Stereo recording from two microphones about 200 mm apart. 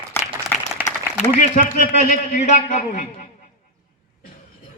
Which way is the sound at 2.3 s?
35° left (ahead or behind).